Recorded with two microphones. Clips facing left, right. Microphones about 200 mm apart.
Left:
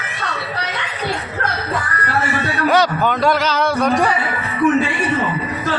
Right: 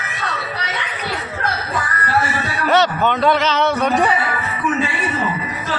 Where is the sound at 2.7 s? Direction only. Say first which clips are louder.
Even; centre (ahead or behind).